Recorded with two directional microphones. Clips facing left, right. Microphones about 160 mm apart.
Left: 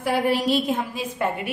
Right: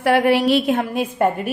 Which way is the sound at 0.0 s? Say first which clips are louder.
Right 6 dB; 70° right (ahead or behind).